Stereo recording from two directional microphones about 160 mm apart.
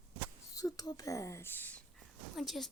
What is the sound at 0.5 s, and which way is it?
Speech, 25° left (ahead or behind).